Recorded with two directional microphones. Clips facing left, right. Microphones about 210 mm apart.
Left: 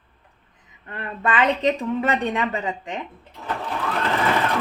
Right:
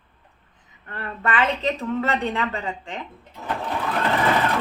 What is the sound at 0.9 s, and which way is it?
Speech, 15° left (ahead or behind).